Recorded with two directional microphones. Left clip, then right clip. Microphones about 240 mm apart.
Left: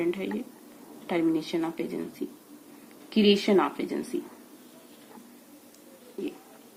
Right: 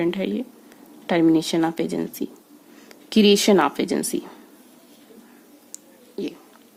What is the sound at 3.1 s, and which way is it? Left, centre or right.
Speech, right.